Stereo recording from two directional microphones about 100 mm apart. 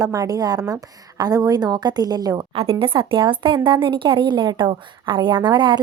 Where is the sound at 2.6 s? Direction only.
65° right (ahead or behind).